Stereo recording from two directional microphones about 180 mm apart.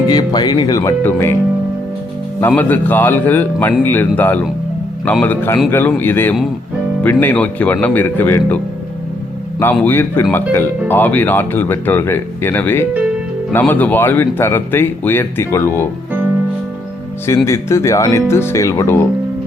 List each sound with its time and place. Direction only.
0.1 s speech: 20° left (ahead or behind)
2.4 s speech: 10° left (ahead or behind)
9.8 s speech: 10° left (ahead or behind)
17.2 s speech: 15° left (ahead or behind)